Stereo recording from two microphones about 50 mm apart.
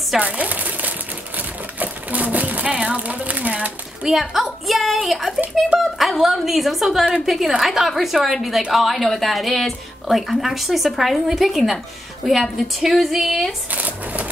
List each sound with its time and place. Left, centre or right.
0.2 s typewriter: right
2.6 s speech: right
4.0 s speech: centre
13.7 s a sound: right